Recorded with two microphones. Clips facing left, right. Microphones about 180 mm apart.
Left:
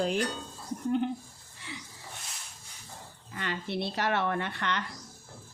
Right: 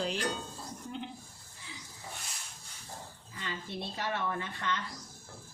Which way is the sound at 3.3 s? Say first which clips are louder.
Left 6 dB; 70° left (ahead or behind).